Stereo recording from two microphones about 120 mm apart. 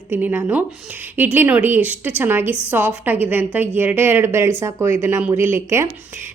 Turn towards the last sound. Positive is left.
turn(degrees=-20)  # may be behind; listen again after turning